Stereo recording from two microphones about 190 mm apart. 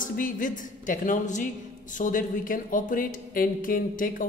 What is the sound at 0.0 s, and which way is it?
A man's voice, 45° left (ahead or behind).